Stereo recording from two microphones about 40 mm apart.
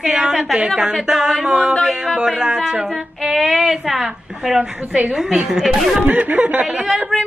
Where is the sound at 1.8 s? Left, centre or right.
Centre.